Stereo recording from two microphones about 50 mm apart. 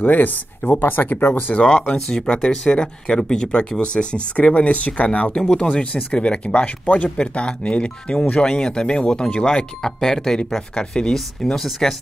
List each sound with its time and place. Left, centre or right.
0.0 s speech: left
2.0 s speech: centre
5.4 s speech: centre